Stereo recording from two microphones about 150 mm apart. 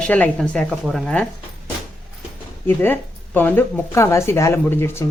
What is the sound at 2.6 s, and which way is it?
Speech, 15° left (ahead or behind).